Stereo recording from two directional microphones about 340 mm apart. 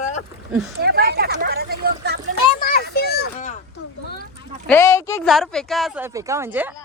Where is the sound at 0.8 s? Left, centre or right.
Right.